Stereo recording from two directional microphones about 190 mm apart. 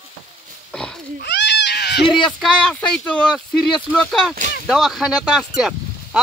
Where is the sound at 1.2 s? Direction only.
65° left (ahead or behind).